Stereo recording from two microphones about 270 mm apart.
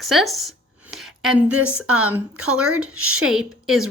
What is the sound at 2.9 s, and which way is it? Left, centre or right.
Speech, right.